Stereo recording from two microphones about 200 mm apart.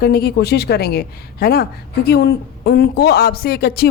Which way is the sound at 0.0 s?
50° left (ahead or behind).